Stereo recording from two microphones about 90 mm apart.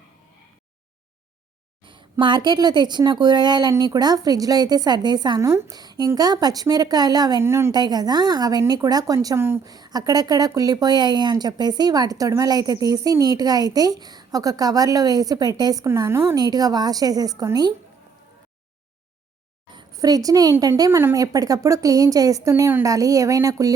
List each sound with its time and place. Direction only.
1.8 s speech: 65° right (ahead or behind)
5.4 s a woman's voice: 35° right (ahead or behind)
5.7 s a woman's voice: 50° right (ahead or behind)
7.4 s a woman's voice: 30° right (ahead or behind)
7.7 s speech: 50° right (ahead or behind); by 9.6 s 30° right (ahead or behind)
9.6 s speech: 45° right (ahead or behind)
15.9 s a woman's voice: 30° right (ahead or behind)
16.3 s speech: 45° right (ahead or behind)
19.9 s a woman's voice: 40° right (ahead or behind)